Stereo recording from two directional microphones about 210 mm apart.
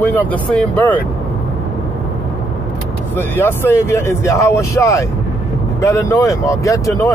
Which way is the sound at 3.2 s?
10° left (ahead or behind).